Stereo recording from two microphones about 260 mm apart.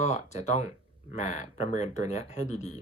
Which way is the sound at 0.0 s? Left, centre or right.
Left.